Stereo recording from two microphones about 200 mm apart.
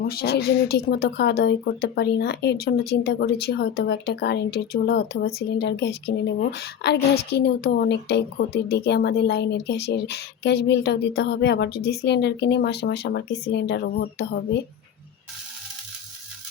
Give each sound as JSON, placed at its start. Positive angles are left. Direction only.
{"t": 0.1, "sound": "speech", "side_deg": 50}